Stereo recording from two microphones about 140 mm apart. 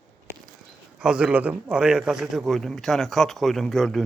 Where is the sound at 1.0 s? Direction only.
5° right (ahead or behind).